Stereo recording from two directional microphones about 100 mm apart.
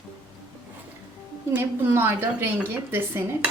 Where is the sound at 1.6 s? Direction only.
25° right (ahead or behind).